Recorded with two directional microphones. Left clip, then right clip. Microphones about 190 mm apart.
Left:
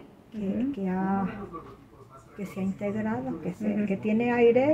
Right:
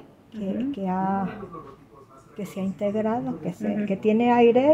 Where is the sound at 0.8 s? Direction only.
35° right (ahead or behind).